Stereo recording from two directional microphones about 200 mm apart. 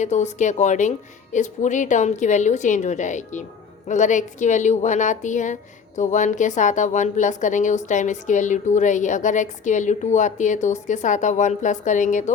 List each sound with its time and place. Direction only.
0.0 s a woman's voice: 35° left (ahead or behind)